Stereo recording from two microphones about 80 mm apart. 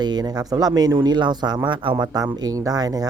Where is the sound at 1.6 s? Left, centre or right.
Right.